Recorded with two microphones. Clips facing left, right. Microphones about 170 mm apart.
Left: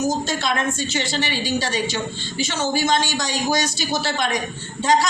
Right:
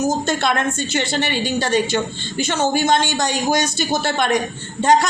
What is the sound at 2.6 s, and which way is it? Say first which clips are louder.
A woman's voice: right 3 dB; 55° right (ahead or behind).